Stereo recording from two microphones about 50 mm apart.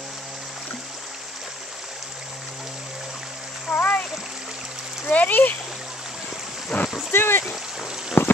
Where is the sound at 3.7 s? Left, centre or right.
Left.